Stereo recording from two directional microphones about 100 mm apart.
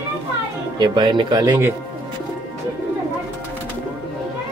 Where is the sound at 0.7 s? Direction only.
50° right (ahead or behind).